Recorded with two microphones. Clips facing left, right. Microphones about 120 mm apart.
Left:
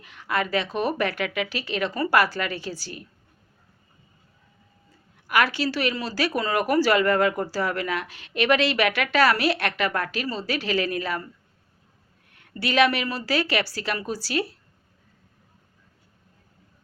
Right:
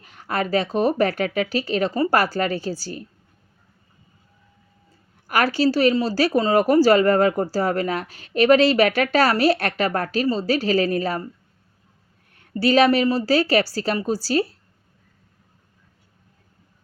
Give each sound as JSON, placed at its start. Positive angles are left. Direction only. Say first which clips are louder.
{"t": 0.0, "sound": "speech", "louder": "right 2 dB", "side_deg": -40}
{"t": 5.3, "sound": "speech", "louder": "right 4 dB", "side_deg": -40}
{"t": 12.3, "sound": "speech", "louder": "right 8 dB", "side_deg": -35}